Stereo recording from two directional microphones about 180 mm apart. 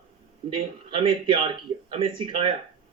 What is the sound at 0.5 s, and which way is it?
A man's voice, 30° right (ahead or behind).